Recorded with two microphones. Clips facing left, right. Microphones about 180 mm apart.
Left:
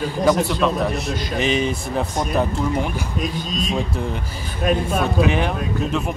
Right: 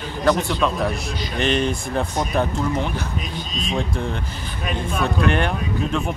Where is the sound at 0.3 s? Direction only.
5° left (ahead or behind).